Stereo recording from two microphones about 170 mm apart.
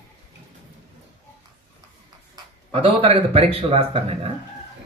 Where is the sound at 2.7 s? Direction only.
35° right (ahead or behind).